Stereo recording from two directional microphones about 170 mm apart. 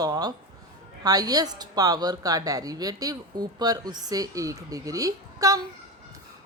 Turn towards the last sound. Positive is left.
turn(degrees=-20)  # may be behind; listen again after turning